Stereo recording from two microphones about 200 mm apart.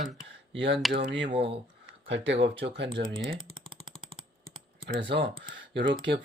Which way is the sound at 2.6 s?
60° right (ahead or behind).